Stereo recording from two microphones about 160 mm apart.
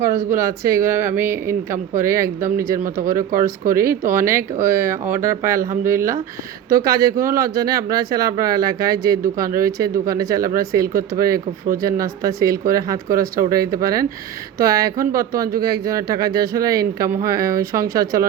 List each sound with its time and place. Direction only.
0.0 s speech: 15° right (ahead or behind)